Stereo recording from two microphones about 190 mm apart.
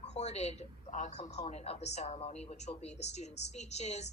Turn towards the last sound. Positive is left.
turn(degrees=35)  # may be behind; listen again after turning